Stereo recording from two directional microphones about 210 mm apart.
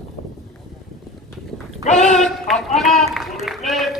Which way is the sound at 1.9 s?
35° left (ahead or behind).